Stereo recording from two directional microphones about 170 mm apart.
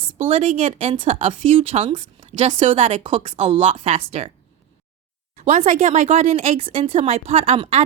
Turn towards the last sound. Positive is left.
turn(degrees=-35)  # may be behind; listen again after turning